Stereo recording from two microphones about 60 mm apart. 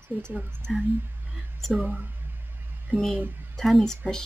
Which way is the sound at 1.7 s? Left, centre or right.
Right.